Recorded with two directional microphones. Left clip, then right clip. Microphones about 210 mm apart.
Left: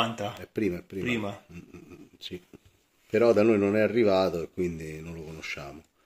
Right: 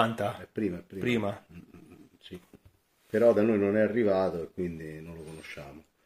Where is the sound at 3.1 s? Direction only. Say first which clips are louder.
Left 2 dB; 60° left (ahead or behind).